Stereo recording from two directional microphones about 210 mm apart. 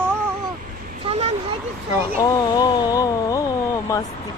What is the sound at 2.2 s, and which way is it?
Music, 15° left (ahead or behind).